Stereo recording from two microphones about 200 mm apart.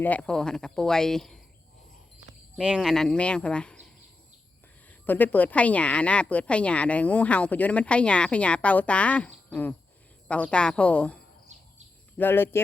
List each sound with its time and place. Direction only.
0.0 s speech: 5° left (ahead or behind)
2.6 s speech: 5° right (ahead or behind)
4.9 s a woman's voice: 10° left (ahead or behind)